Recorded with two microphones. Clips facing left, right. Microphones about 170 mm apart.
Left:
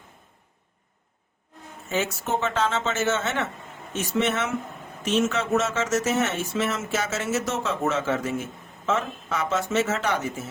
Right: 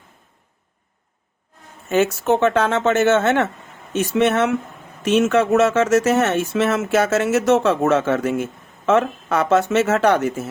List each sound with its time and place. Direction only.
1.9 s speech: 65° right (ahead or behind)